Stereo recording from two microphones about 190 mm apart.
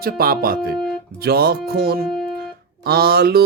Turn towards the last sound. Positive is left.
turn(degrees=-55)  # may be behind; listen again after turning